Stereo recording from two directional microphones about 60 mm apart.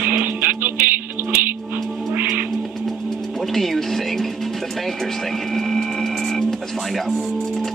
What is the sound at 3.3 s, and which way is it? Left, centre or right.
Music, centre.